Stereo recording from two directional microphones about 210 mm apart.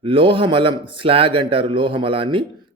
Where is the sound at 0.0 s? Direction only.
25° right (ahead or behind).